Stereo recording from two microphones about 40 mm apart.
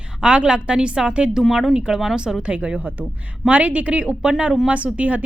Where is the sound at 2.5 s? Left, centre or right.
Right.